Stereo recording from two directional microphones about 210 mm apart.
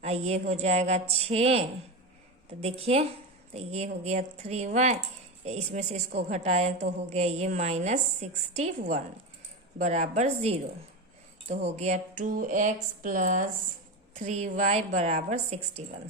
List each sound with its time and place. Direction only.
0.0 s a woman's voice: 30° right (ahead or behind)